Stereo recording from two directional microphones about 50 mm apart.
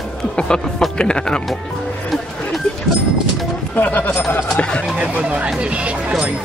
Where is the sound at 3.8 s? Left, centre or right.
Left.